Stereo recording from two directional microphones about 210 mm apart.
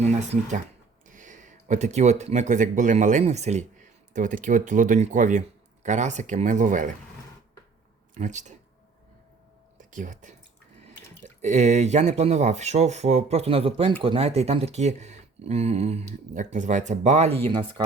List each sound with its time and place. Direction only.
0.0 s speech: 35° right (ahead or behind)
8.1 s speech: 35° right (ahead or behind)
9.7 s speech: 35° right (ahead or behind)